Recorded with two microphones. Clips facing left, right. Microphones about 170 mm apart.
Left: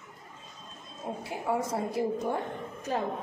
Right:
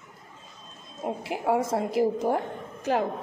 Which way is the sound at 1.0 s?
85° right.